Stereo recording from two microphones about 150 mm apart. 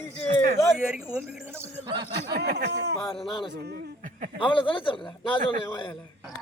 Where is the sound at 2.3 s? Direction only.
90° right.